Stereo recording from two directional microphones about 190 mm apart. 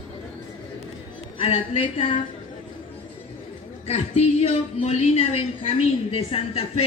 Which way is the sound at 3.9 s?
35° left (ahead or behind).